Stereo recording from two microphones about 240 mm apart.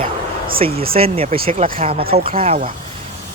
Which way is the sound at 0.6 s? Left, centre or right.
Right.